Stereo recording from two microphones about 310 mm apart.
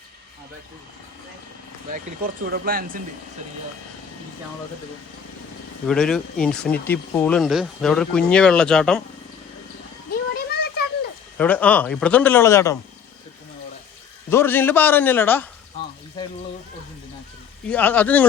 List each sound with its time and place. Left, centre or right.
2.2 s speech: right
5.9 s speech: centre
10.1 s a sound: left
11.3 s speech: centre
14.3 s a man's voice: centre
17.7 s speech: centre